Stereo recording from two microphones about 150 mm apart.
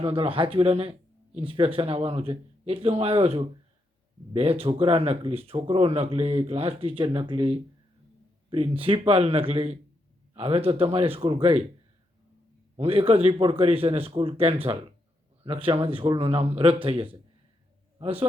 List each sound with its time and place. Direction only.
0.0 s speech: 40° right (ahead or behind)
12.7 s speech: 40° right (ahead or behind)